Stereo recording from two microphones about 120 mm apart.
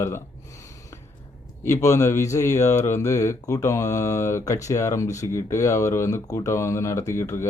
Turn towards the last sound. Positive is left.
turn(degrees=25)  # may be behind; listen again after turning